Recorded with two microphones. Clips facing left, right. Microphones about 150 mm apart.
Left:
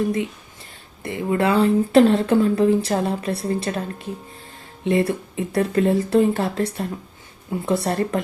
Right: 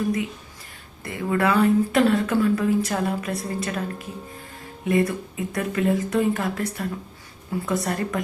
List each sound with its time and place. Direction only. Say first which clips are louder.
1.0 s speech: left 2 dB; 25° left (ahead or behind)